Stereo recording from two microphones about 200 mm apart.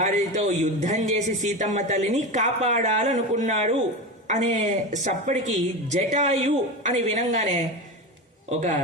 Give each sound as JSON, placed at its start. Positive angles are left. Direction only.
{"t": 0.0, "sound": "a man's voice", "side_deg": -35}